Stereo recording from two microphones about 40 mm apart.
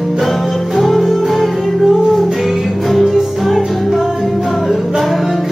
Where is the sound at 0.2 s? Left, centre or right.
Centre.